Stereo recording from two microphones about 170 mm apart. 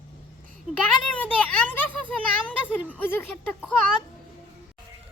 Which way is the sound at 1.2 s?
10° left (ahead or behind).